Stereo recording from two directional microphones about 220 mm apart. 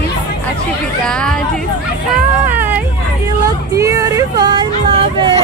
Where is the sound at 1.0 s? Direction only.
5° left (ahead or behind).